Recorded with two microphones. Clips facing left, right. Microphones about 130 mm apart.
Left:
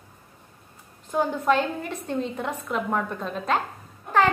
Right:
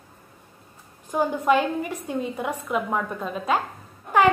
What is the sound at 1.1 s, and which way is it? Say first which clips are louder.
A woman's voice: right 1 dB; 10° right (ahead or behind).